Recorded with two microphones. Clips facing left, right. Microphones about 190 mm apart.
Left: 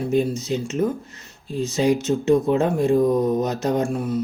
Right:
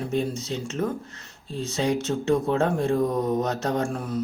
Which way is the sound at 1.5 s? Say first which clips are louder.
Left 6 dB; 30° right (ahead or behind).